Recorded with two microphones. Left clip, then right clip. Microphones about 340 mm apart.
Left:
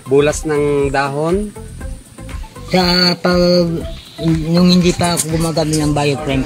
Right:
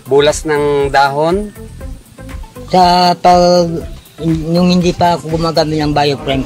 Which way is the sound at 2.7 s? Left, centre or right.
Right.